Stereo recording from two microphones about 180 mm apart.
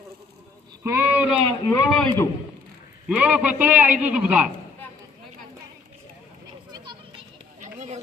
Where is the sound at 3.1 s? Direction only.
5° right (ahead or behind).